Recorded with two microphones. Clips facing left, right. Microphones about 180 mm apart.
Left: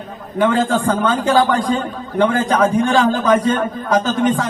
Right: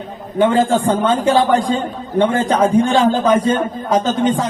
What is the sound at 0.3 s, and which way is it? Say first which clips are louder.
A man's voice: right 2 dB; 25° right (ahead or behind).